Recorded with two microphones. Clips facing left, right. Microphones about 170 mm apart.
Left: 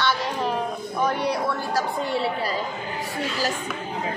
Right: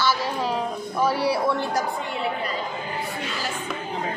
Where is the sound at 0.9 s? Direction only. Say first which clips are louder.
Right 2 dB; 5° right (ahead or behind).